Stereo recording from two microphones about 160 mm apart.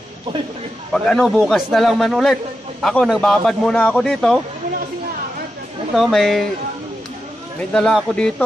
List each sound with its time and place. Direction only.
0.9 s a man's voice: 5° left (ahead or behind)
5.9 s a man's voice: centre (ahead or behind)
7.7 s a man's voice: 5° left (ahead or behind)